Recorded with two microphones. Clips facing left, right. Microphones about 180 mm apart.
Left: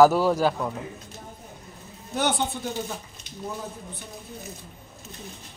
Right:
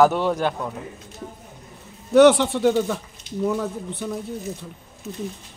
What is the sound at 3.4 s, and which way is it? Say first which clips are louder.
Speech: right 11 dB; 75° right (ahead or behind).